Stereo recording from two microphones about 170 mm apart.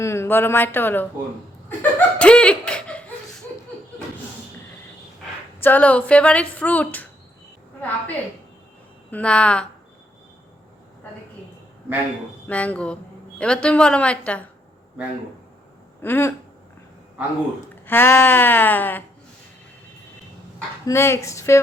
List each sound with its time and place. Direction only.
0.0 s speech: 15° left (ahead or behind)
5.6 s a woman's voice: 10° left (ahead or behind)
12.5 s a woman's voice: 10° left (ahead or behind)
16.0 s a sound: 15° left (ahead or behind)
17.8 s a woman's voice: 10° left (ahead or behind)
20.8 s a woman's voice: 15° left (ahead or behind)